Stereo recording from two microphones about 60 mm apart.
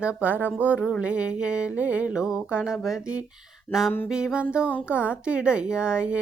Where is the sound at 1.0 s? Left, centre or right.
Centre.